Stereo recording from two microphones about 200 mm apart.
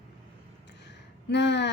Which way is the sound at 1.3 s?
60° left (ahead or behind).